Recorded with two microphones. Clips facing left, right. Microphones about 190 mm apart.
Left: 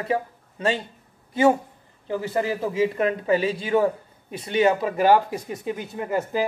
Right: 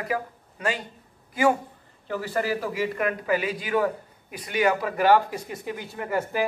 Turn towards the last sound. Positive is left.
turn(degrees=20)  # may be behind; listen again after turning